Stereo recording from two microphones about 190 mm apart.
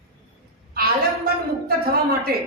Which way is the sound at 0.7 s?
55° right (ahead or behind).